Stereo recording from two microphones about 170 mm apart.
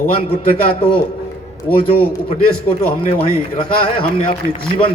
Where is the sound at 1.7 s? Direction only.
60° left (ahead or behind).